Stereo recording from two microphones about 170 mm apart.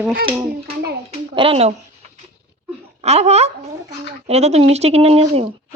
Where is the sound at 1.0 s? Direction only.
30° right (ahead or behind).